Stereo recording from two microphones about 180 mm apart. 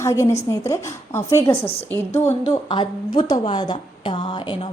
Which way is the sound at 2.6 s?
25° left (ahead or behind).